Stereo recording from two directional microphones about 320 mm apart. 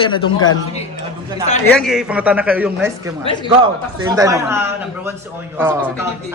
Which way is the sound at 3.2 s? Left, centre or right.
Centre.